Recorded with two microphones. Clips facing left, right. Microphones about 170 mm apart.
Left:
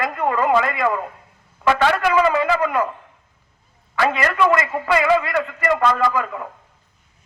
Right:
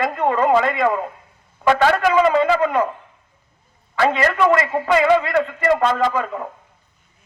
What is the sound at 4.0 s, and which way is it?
A man's voice, 25° right (ahead or behind).